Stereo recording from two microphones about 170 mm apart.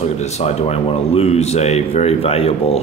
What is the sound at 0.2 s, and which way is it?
Speech, 40° left (ahead or behind).